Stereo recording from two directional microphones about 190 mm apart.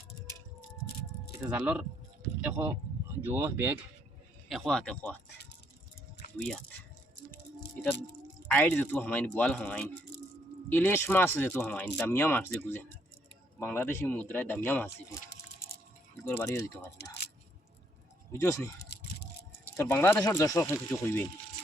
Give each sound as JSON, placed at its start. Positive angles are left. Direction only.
{"t": 1.5, "sound": "speech", "side_deg": -5}
{"t": 4.4, "sound": "speech", "side_deg": 0}
{"t": 8.5, "sound": "speech", "side_deg": 10}
{"t": 16.3, "sound": "speech", "side_deg": 15}
{"t": 18.3, "sound": "speech", "side_deg": 15}
{"t": 18.9, "sound": "a sound", "side_deg": 60}
{"t": 19.7, "sound": "speech", "side_deg": 15}